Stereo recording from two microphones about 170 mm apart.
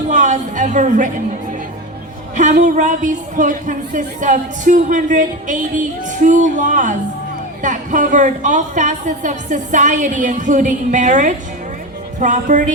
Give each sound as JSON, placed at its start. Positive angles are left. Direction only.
{"t": 0.1, "sound": "a woman's voice", "side_deg": -45}
{"t": 2.3, "sound": "a woman's voice", "side_deg": -45}